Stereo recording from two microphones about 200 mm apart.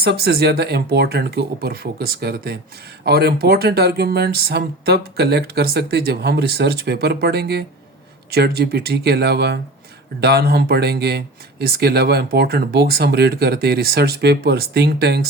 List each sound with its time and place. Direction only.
0.0 s speech: 55° right (ahead or behind)